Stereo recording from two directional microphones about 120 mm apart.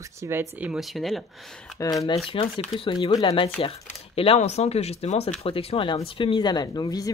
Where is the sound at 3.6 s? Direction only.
50° left (ahead or behind); by 7.1 s 30° left (ahead or behind).